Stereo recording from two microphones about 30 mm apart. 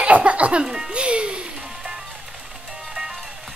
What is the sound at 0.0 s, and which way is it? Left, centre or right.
Music, right.